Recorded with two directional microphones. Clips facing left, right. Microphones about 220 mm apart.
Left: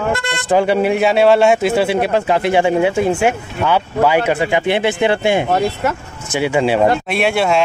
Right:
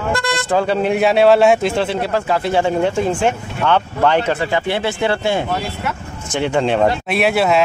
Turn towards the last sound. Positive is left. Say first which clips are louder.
# even
turn(degrees=0)  # may be behind; listen again after turning